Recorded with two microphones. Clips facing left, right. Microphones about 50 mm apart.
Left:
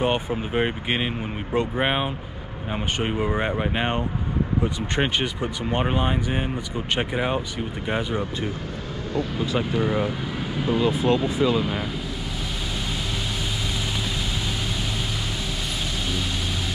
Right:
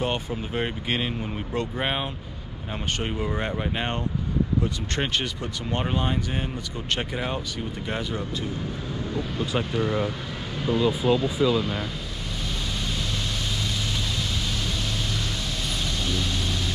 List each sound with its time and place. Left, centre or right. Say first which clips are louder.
0.0 s speech: left 4 dB; left
9.6 s speech: left 2 dB; centre